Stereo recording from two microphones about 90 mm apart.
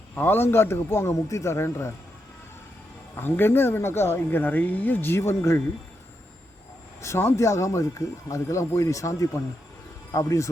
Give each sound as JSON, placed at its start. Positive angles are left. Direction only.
{"t": 0.2, "sound": "speech", "side_deg": 25}
{"t": 3.2, "sound": "speech", "side_deg": 25}
{"t": 7.0, "sound": "speech", "side_deg": 30}